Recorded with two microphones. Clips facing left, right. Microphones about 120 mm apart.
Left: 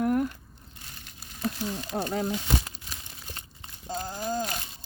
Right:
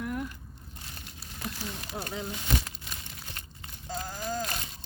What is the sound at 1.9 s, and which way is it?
Speech, 35° left (ahead or behind).